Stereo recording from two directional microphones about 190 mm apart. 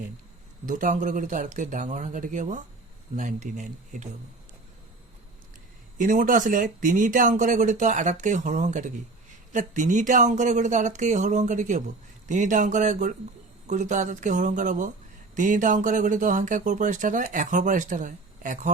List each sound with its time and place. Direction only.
0.6 s speech: 45° right (ahead or behind)
6.0 s speech: 45° right (ahead or behind)